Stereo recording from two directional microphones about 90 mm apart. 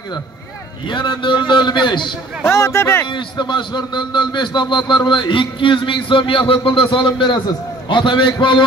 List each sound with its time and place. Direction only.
0.8 s a man's voice: 60° left (ahead or behind)
2.4 s speech: 30° left (ahead or behind)
3.1 s a man's voice: 60° left (ahead or behind)